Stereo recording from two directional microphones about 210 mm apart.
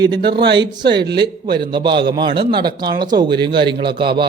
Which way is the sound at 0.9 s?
50° right (ahead or behind).